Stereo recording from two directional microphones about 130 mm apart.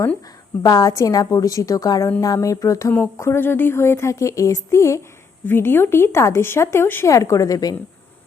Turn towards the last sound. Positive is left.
turn(degrees=30)  # may be behind; listen again after turning